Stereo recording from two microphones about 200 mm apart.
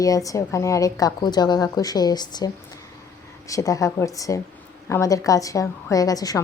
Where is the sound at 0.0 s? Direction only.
15° left (ahead or behind).